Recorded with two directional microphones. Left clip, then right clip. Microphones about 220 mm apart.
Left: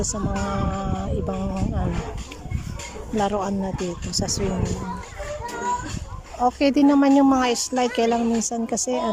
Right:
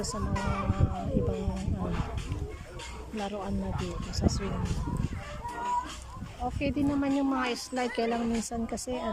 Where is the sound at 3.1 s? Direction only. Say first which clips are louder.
Left 12 dB; 25° left (ahead or behind).